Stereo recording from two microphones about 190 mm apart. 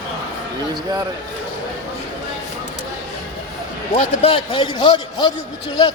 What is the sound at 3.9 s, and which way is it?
A man's voice, 30° left (ahead or behind).